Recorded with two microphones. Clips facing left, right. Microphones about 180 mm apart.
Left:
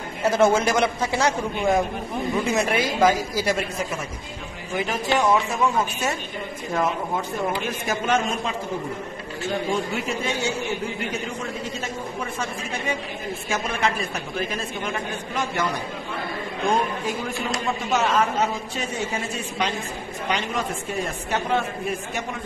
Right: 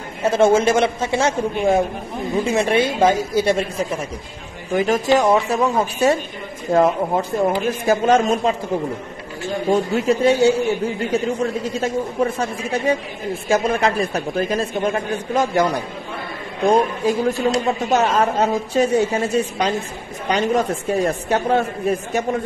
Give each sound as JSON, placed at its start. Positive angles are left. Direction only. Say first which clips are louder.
{"t": 0.3, "sound": "speech", "louder": "right 4 dB", "side_deg": -25}
{"t": 4.7, "sound": "a man's voice", "louder": "right 7 dB", "side_deg": -45}
{"t": 9.7, "sound": "a man's voice", "louder": "right 8 dB", "side_deg": -40}
{"t": 12.2, "sound": "a man's voice", "louder": "right 9 dB", "side_deg": -35}